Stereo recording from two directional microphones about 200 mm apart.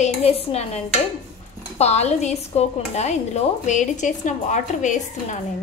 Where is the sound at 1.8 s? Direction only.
35° left (ahead or behind).